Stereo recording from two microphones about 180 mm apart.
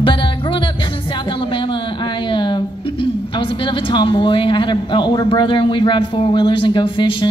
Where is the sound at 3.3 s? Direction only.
25° left (ahead or behind).